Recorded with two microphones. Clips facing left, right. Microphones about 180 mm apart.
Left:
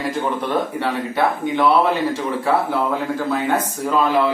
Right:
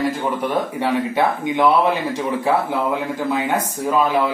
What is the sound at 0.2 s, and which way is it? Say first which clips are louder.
Speech: even; 10° right (ahead or behind).